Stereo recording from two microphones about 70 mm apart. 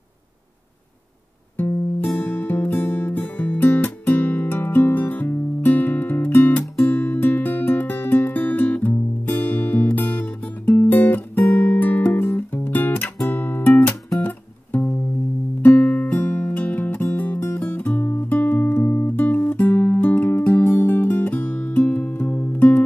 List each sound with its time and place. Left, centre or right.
2.0 s music: left
13.3 s guitar: left
15.6 s music: left